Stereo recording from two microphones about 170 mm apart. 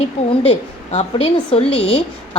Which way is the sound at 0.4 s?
35° left (ahead or behind).